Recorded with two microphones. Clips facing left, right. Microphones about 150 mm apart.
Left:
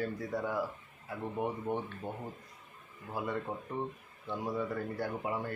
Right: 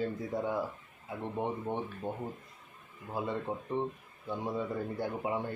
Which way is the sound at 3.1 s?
20° right (ahead or behind).